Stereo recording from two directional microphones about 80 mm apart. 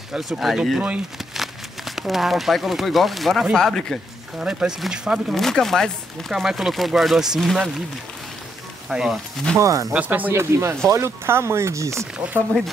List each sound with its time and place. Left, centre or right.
0.1 s speech: centre
0.7 s speech: centre
1.1 s speech: centre
4.4 s speech: centre
5.3 s speech: centre
8.8 s speech: centre
9.6 s speech: right
9.9 s speech: right
10.3 s speech: right